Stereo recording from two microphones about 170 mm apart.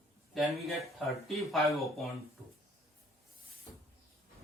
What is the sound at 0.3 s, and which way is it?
Speech, centre (ahead or behind).